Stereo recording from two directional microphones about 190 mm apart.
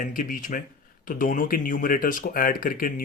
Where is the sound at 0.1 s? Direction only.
45° left (ahead or behind).